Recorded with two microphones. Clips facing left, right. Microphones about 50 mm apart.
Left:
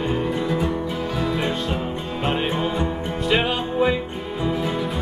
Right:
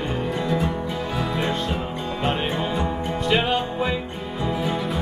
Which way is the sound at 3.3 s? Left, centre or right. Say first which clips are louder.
Left 1 dB; centre.